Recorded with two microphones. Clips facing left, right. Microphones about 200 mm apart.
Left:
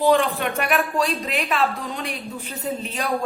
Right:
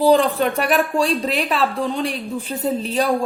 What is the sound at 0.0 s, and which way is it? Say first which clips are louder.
Speech: right 4 dB; 35° right (ahead or behind).